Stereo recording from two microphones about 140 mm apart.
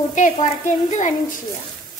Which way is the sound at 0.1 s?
60° left (ahead or behind).